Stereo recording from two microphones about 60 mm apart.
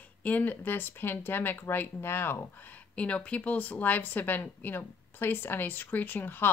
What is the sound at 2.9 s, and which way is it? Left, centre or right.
Speech, left.